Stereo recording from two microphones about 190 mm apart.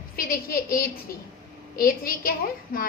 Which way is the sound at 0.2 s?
50° left (ahead or behind).